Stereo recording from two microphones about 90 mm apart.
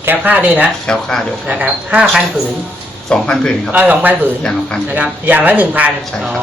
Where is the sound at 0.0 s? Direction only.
20° right (ahead or behind).